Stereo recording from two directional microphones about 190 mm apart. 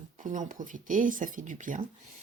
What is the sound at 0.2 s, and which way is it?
Speech, 40° right (ahead or behind).